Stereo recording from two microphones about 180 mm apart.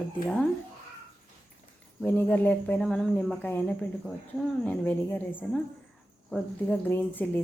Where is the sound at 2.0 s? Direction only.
10° left (ahead or behind).